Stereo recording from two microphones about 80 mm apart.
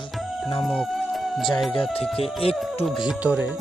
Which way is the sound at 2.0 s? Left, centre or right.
Centre.